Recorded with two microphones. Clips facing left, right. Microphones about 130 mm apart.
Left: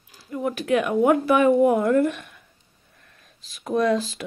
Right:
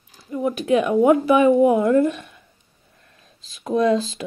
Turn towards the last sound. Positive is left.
turn(degrees=-25)  # may be behind; listen again after turning